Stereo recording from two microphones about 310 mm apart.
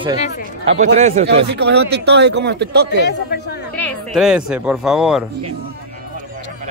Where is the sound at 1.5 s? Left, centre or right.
Right.